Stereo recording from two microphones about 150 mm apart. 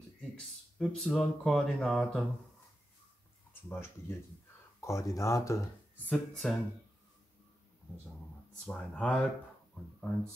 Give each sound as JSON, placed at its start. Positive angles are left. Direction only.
{"t": 0.4, "sound": "speech", "side_deg": 5}
{"t": 3.6, "sound": "speech", "side_deg": 15}
{"t": 6.0, "sound": "speech", "side_deg": 5}
{"t": 8.6, "sound": "speech", "side_deg": 5}